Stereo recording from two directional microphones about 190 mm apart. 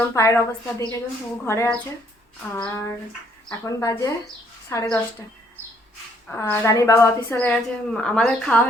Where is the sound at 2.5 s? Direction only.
20° left (ahead or behind).